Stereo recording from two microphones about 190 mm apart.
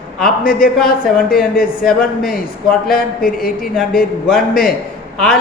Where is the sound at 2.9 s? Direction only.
50° left (ahead or behind).